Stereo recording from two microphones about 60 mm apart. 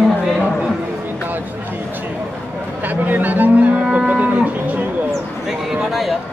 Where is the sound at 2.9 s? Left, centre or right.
Right.